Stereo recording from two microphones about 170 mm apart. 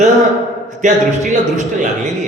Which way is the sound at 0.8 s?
45° right (ahead or behind).